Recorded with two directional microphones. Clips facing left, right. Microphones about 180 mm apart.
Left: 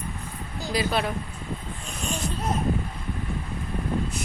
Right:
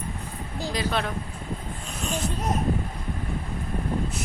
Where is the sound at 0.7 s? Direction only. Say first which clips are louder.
Left 2 dB; 10° left (ahead or behind).